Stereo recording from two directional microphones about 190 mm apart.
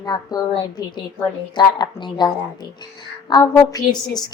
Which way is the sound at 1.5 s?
25° left (ahead or behind).